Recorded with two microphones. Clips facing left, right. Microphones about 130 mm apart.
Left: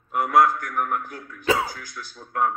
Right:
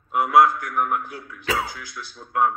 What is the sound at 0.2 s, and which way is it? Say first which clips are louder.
A man's voice: right 2 dB; 50° left (ahead or behind).